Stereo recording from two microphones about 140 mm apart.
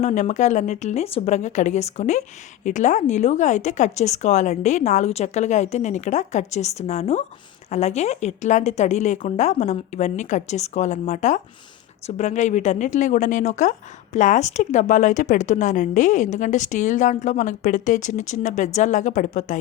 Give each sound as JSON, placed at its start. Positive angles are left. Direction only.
{"t": 0.0, "sound": "a woman's voice", "side_deg": 55}